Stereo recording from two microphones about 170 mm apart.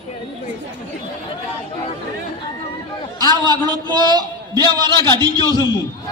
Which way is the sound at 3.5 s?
25° right (ahead or behind).